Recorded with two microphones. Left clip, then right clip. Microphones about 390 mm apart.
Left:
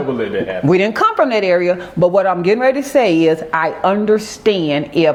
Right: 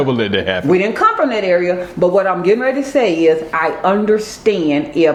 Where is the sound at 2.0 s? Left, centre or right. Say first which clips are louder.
Even; left.